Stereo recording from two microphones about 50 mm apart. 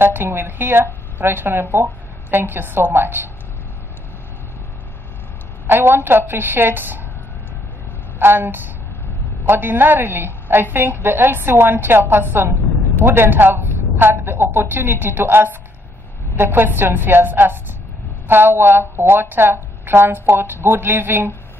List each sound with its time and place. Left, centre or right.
0.0 s a woman's voice: right
5.7 s a woman's voice: right
8.2 s a woman's voice: right